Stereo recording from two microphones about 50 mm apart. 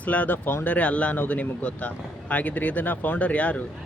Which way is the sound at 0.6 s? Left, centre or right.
Left.